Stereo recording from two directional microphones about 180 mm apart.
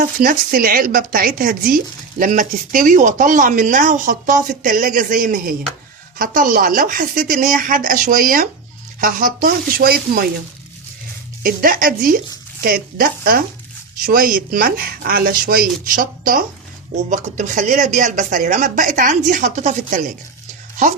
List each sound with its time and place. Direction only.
0.0 s a woman's voice: 50° right (ahead or behind)
11.4 s a woman's voice: 50° right (ahead or behind)